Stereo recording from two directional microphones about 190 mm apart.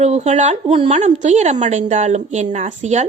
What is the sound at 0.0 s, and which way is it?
A woman's voice, 35° right (ahead or behind).